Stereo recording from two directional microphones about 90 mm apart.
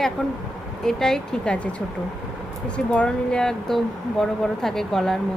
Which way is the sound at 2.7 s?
10° left (ahead or behind).